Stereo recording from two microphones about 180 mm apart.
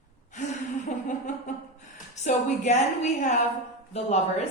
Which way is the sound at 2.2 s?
40° left (ahead or behind).